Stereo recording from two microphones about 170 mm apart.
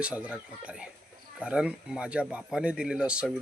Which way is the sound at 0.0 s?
5° right (ahead or behind).